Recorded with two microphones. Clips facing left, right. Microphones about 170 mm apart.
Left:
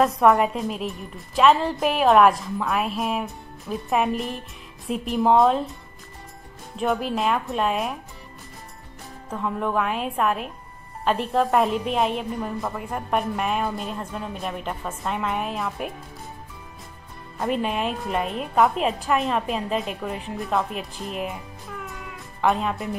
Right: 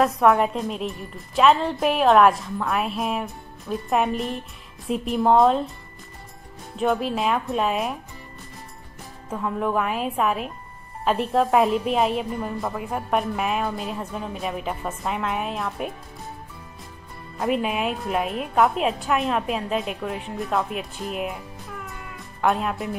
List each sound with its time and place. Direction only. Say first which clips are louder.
0.0 s a woman's voice: even; centre (ahead or behind)
6.8 s a woman's voice: right 1 dB; centre (ahead or behind)
9.3 s a woman's voice: right 1 dB; centre (ahead or behind)
17.4 s a woman's voice: right 1 dB; 5° right (ahead or behind)
22.1 s music: even; centre (ahead or behind)